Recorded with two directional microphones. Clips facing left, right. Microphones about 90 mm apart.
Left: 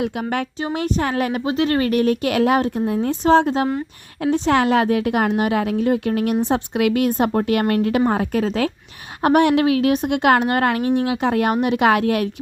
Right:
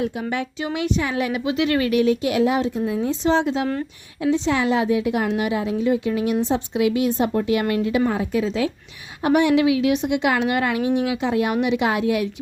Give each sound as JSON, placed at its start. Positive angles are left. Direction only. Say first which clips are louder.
{"t": 0.0, "sound": "speech", "louder": "left 2 dB", "side_deg": 70}
{"t": 0.6, "sound": "a woman's voice", "louder": "left 1 dB", "side_deg": 45}